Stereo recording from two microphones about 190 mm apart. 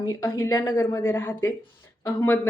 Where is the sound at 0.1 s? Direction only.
15° left (ahead or behind).